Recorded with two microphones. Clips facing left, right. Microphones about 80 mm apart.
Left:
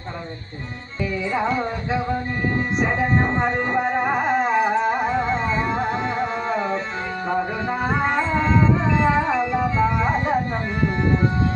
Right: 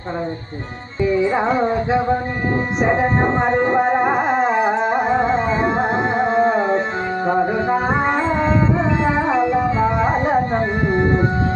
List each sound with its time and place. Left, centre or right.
1.3 s music: right
6.3 s tabla: right
7.3 s a sound: right
8.2 s music: right
9.7 s organ: right